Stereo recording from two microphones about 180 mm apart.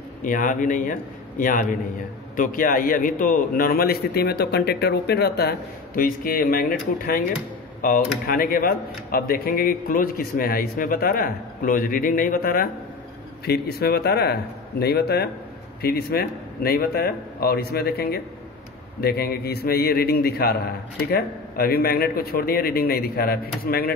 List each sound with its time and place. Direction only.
0.2 s a man's voice: 45° left (ahead or behind)